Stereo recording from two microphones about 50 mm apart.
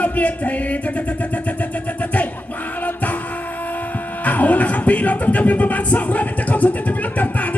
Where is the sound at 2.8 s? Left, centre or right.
Left.